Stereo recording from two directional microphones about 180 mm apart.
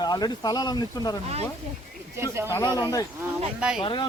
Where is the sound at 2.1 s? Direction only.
15° right (ahead or behind).